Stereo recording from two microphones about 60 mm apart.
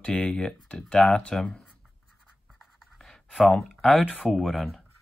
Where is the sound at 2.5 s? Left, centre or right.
Centre.